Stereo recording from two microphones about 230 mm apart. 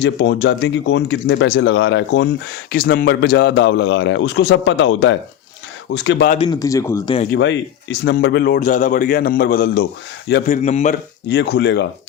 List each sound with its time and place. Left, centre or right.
0.0 s speech: left
6.5 s speech: centre
7.3 s speech: left
8.6 s a man's voice: left
10.5 s a man's voice: left
11.3 s speech: left